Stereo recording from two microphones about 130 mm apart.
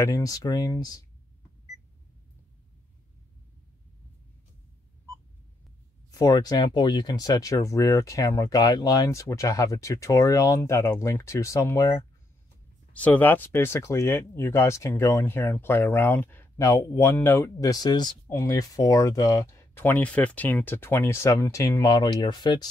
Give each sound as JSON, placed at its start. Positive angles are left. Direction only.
{"t": 0.0, "sound": "speech", "side_deg": 25}
{"t": 6.1, "sound": "speech", "side_deg": 30}
{"t": 13.0, "sound": "speech", "side_deg": 15}